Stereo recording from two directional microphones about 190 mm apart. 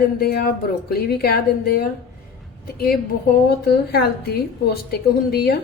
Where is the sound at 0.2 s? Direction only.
55° left (ahead or behind).